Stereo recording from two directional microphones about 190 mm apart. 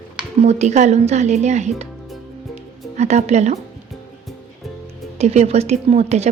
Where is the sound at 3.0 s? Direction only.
35° right (ahead or behind).